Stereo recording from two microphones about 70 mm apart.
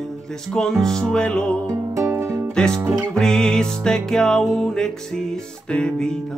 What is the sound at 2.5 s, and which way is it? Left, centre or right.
Music, centre.